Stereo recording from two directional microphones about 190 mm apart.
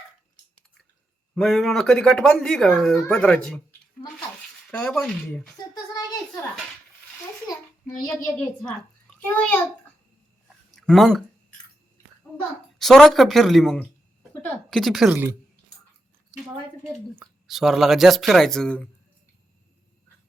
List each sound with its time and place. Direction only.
1.4 s speech: centre (ahead or behind)
7.4 s a child's voice: 20° left (ahead or behind)
8.2 s a child's voice: 5° left (ahead or behind)
10.7 s a sound: centre (ahead or behind)
12.8 s speech: centre (ahead or behind)
17.2 s speech: centre (ahead or behind)